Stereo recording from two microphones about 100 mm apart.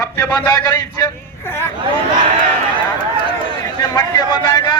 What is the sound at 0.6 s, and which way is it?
Speech, 35° left (ahead or behind).